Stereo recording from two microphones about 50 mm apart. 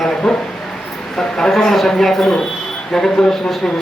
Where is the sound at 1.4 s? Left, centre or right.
Centre.